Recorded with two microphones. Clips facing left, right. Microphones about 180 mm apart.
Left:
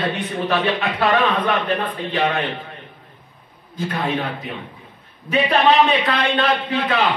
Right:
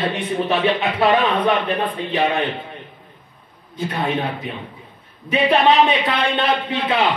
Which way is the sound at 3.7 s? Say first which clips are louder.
Right 1 dB; 25° right (ahead or behind).